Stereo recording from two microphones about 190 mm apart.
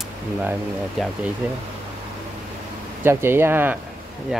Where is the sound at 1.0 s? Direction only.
Centre (ahead or behind).